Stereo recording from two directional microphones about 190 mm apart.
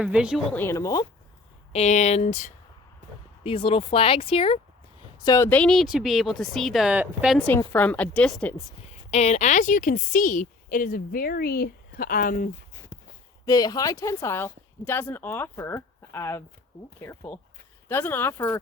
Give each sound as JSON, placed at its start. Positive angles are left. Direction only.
{"t": 0.0, "sound": "speech", "side_deg": -5}
{"t": 0.5, "sound": "a woman's voice", "side_deg": 15}
{"t": 1.7, "sound": "speech", "side_deg": 35}
{"t": 7.3, "sound": "a woman's voice", "side_deg": 5}
{"t": 9.0, "sound": "a woman's voice", "side_deg": 35}
{"t": 12.9, "sound": "a sound", "side_deg": 20}
{"t": 13.4, "sound": "a woman's voice", "side_deg": 20}